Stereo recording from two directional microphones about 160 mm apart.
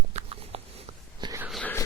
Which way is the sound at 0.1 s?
40° right (ahead or behind).